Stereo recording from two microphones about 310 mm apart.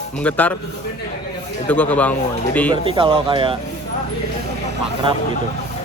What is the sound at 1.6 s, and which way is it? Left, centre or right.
Speech, centre.